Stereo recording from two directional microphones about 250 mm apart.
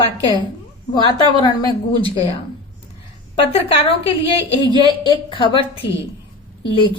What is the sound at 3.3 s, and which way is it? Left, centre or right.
A woman's voice, left.